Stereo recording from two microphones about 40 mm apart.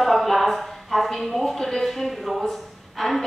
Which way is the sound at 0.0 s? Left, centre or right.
Centre.